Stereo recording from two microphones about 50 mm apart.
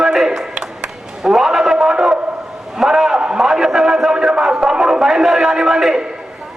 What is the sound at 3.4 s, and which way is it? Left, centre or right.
A man's voice, centre.